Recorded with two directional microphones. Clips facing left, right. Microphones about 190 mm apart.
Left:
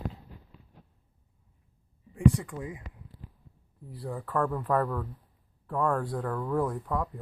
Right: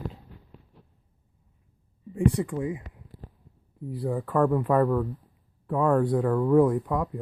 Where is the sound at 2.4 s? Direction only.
25° right (ahead or behind).